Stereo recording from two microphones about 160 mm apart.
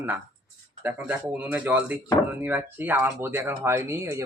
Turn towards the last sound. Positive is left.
turn(degrees=-15)  # may be behind; listen again after turning